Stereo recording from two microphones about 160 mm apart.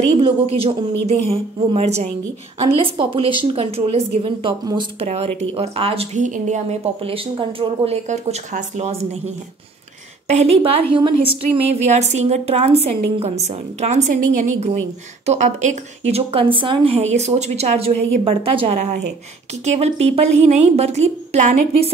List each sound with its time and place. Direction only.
0.2 s a woman's voice: 35° right (ahead or behind)
5.0 s a woman's voice: 45° right (ahead or behind)
10.2 s a woman's voice: 40° right (ahead or behind)